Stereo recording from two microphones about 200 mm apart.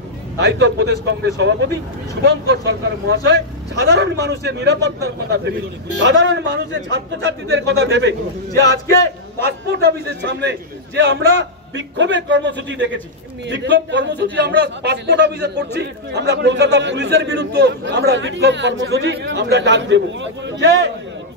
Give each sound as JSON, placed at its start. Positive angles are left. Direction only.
{"t": 0.4, "sound": "a man's voice", "side_deg": -60}
{"t": 11.7, "sound": "a man's voice", "side_deg": -65}